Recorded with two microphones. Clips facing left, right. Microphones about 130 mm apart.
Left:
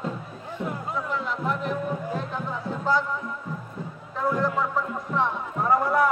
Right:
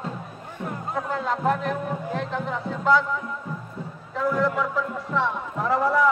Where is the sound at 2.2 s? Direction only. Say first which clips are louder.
Right 3 dB; 90° right.